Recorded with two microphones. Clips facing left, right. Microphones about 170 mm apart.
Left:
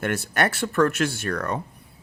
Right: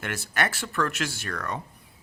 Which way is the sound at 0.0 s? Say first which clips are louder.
Left 5 dB; 50° left (ahead or behind).